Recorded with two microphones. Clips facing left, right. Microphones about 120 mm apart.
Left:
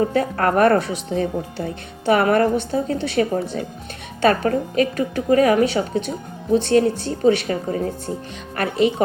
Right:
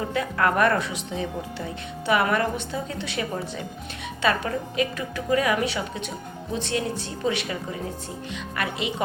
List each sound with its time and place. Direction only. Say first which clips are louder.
0.0 s speech: left 5 dB; 40° left (ahead or behind)